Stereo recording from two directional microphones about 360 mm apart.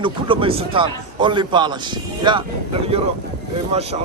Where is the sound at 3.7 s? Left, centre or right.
Centre.